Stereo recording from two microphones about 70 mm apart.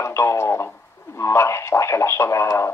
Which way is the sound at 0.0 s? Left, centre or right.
Left.